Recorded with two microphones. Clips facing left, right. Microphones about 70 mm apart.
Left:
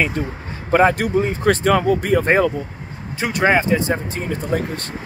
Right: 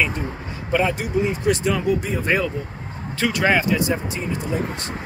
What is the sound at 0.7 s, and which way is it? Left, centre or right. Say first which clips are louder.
Speech: left 6 dB; left.